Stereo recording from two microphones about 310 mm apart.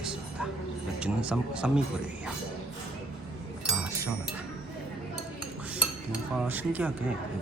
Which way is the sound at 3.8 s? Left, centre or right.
Centre.